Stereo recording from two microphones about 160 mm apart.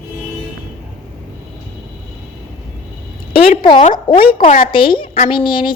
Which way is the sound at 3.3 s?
35° left (ahead or behind).